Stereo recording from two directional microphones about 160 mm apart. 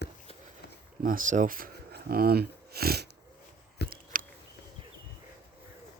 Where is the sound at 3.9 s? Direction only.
60° right (ahead or behind).